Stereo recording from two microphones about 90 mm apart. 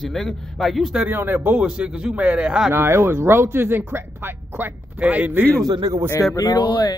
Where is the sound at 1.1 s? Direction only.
20° right (ahead or behind).